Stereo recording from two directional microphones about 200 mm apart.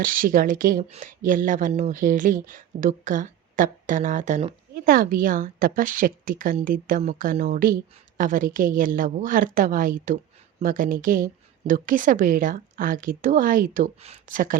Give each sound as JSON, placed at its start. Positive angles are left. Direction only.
{"t": 0.0, "sound": "speech", "side_deg": -45}
{"t": 4.7, "sound": "a woman's voice", "side_deg": -45}